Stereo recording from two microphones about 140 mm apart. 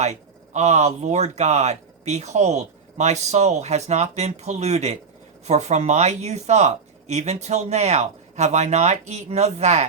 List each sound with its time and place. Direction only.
0.0 s speech: 50° right (ahead or behind)